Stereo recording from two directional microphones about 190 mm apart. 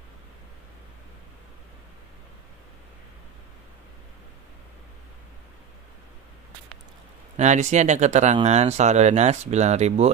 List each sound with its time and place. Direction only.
7.3 s speech: 40° right (ahead or behind)